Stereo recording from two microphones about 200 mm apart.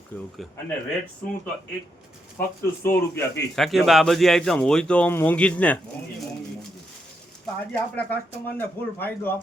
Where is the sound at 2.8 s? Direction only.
10° left (ahead or behind).